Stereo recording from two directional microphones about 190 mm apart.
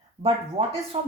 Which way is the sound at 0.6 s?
30° right (ahead or behind).